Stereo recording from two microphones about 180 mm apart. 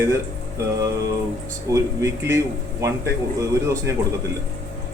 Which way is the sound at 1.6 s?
15° right (ahead or behind).